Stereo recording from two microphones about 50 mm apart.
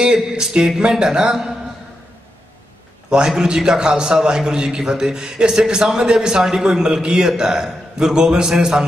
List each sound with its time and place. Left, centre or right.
0.0 s a man's voice: centre
3.1 s a man's voice: centre